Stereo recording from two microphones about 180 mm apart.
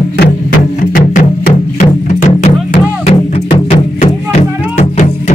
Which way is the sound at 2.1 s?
40° left (ahead or behind).